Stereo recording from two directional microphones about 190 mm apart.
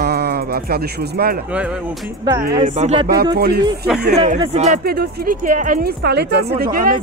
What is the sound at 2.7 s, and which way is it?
Speech, 35° right (ahead or behind).